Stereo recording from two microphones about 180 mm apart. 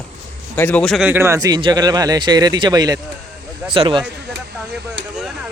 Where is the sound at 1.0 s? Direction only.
15° right (ahead or behind); by 4.0 s 30° right (ahead or behind).